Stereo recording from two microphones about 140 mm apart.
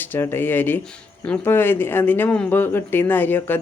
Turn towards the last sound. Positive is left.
turn(degrees=15)  # may be behind; listen again after turning